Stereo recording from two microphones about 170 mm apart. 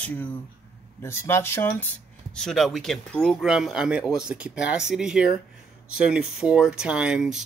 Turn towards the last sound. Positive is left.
turn(degrees=-5)  # may be behind; listen again after turning